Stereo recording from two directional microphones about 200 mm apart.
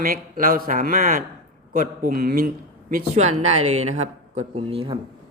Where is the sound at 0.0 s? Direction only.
45° right (ahead or behind).